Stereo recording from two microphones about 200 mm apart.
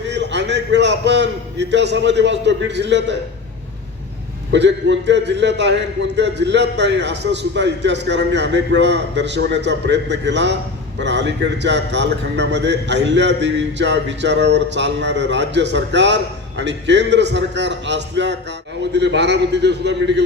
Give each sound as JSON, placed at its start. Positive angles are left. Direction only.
{"t": 0.1, "sound": "a man's voice", "side_deg": -60}
{"t": 4.5, "sound": "a man's voice", "side_deg": -60}